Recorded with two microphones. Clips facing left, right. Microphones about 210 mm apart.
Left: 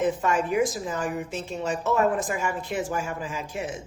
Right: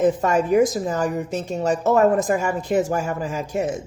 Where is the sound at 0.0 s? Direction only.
40° right (ahead or behind).